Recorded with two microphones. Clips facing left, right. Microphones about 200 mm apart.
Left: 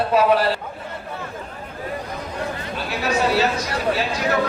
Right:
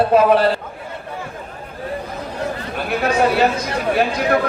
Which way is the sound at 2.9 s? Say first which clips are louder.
Right 4 dB; 55° right (ahead or behind).